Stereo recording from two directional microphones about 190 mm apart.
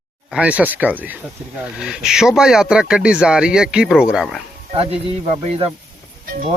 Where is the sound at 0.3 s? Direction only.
5° right (ahead or behind).